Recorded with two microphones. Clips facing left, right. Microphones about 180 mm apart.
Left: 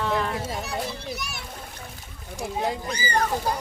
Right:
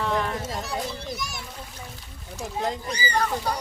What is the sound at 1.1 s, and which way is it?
Splash, 65° left (ahead or behind).